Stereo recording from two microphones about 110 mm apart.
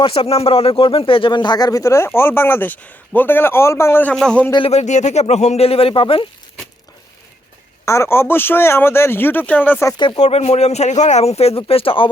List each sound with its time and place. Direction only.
0.0 s a man's voice: 60° left (ahead or behind); by 4.1 s 20° left (ahead or behind)
4.1 s a man's voice: 5° left (ahead or behind)
4.7 s speech: 85° left; by 6.2 s 55° left (ahead or behind)
7.9 s a man's voice: 25° left (ahead or behind)
10.2 s speech: 75° left (ahead or behind); by 12.0 s 60° left (ahead or behind)